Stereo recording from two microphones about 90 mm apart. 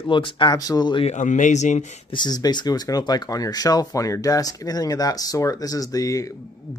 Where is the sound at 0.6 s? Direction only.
45° left (ahead or behind).